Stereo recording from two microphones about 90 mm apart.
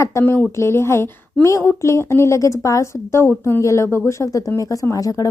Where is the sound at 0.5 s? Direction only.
30° left (ahead or behind).